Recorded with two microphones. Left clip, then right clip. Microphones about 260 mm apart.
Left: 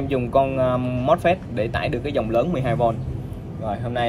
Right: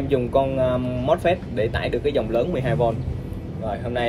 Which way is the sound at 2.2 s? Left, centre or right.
Left.